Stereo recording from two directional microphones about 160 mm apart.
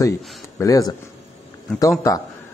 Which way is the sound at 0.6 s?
20° left (ahead or behind).